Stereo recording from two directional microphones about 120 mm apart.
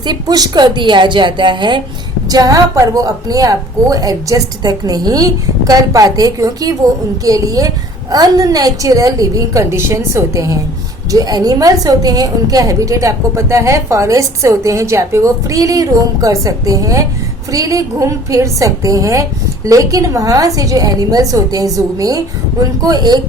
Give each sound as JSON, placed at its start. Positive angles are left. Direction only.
{"t": 0.0, "sound": "a woman's voice", "side_deg": -35}
{"t": 2.3, "sound": "a woman's voice", "side_deg": -30}